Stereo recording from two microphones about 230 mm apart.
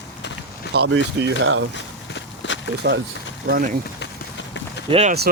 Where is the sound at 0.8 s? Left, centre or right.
Right.